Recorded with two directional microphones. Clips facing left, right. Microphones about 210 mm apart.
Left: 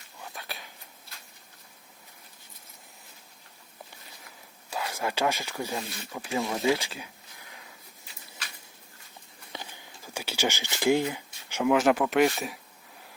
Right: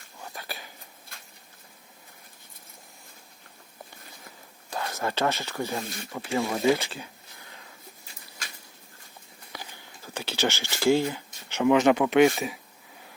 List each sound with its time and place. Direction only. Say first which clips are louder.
0.2 s a sound: right 2 dB; centre (ahead or behind)
4.7 s speech: right 1 dB; 10° left (ahead or behind)
5.8 s speech: right 2 dB; 50° right (ahead or behind)
6.1 s speech: right 2 dB; centre (ahead or behind)
6.8 s speech: right 2 dB; 10° left (ahead or behind)
9.5 s a sound: left 1 dB; 25° left (ahead or behind)
10.2 s speech: right 2 dB; 10° left (ahead or behind)